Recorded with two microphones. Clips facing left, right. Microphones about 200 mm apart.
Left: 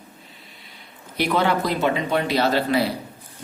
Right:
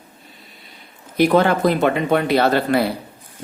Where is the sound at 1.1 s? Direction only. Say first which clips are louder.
Right 6 dB; 50° right (ahead or behind).